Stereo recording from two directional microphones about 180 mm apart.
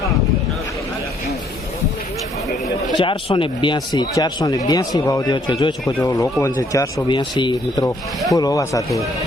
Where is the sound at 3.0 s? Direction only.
30° left (ahead or behind).